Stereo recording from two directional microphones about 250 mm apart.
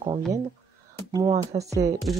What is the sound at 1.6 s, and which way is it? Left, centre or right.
Speech, centre.